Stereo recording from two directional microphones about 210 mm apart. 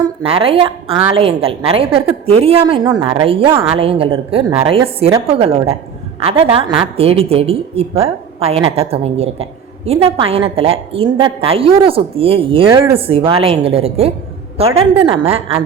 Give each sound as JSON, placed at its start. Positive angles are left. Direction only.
{"t": 0.2, "sound": "a woman's voice", "side_deg": -25}